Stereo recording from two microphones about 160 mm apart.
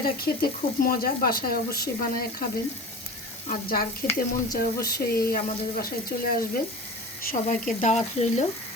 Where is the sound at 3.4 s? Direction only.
65° left (ahead or behind).